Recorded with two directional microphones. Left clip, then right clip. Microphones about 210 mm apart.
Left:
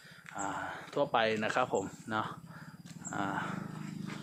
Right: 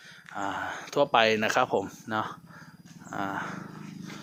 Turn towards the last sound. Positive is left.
turn(degrees=-15)  # may be behind; listen again after turning